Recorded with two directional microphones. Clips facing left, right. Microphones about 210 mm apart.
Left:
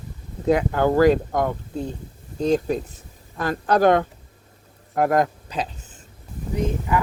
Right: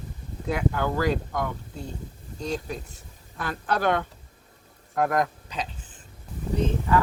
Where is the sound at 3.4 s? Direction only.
40° left (ahead or behind).